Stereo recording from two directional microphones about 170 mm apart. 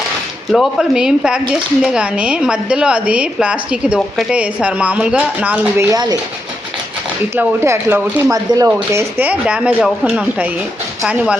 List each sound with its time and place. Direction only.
0.5 s a woman's voice: centre (ahead or behind)
7.3 s a woman's voice: 15° right (ahead or behind)